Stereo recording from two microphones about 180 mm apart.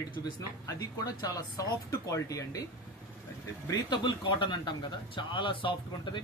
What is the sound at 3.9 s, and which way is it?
Speech, 25° left (ahead or behind).